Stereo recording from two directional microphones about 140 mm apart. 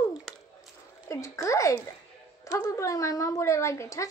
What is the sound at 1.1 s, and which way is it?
Speech, 20° left (ahead or behind).